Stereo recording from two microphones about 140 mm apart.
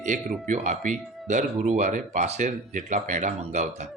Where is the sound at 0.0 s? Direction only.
60° right (ahead or behind).